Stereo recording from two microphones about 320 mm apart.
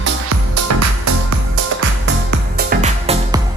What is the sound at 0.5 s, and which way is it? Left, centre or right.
Music, right.